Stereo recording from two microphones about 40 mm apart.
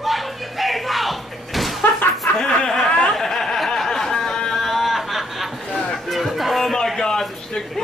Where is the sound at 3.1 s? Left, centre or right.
Centre.